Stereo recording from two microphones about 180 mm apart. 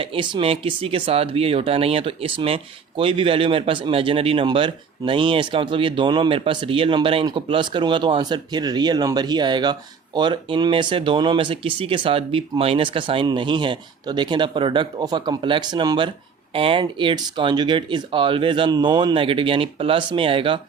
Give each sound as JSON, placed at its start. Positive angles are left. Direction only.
{"t": 0.0, "sound": "speech", "side_deg": -30}